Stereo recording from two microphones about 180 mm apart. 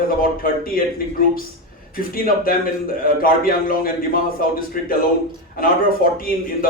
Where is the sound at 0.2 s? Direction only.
55° left (ahead or behind).